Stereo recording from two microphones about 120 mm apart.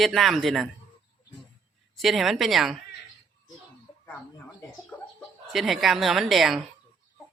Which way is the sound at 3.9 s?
20° left (ahead or behind).